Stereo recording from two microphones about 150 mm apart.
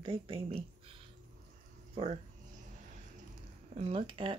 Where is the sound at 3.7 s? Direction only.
40° right (ahead or behind).